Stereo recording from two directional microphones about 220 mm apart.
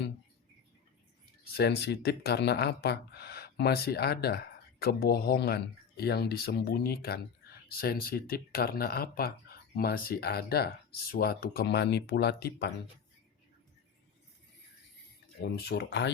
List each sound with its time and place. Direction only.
1.5 s speech: 50° left (ahead or behind)
15.4 s speech: 45° left (ahead or behind)